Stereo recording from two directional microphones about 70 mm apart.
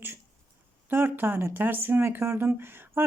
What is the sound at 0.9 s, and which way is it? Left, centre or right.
A woman's voice, right.